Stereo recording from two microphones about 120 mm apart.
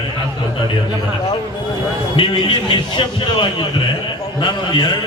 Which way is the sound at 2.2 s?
45° left (ahead or behind).